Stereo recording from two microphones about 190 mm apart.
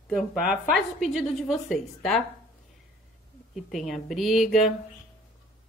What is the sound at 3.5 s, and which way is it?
Speech, centre (ahead or behind).